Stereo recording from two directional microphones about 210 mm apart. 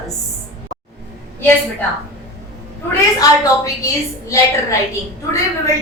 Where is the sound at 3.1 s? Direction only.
15° left (ahead or behind).